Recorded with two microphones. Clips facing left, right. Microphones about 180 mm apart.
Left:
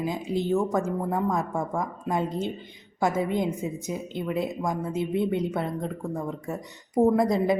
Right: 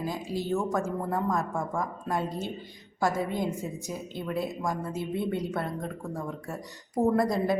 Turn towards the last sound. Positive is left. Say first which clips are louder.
# left 3 dB
turn(degrees=20)  # may be behind; listen again after turning